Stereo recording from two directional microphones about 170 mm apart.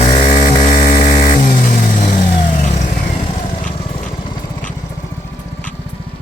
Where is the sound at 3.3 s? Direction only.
35° left (ahead or behind).